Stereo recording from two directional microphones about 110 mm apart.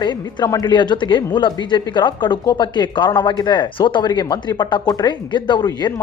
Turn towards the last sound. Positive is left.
turn(degrees=40)  # may be behind; listen again after turning